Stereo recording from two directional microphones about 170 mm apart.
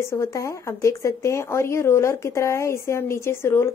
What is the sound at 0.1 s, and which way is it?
A woman's voice, 20° left (ahead or behind).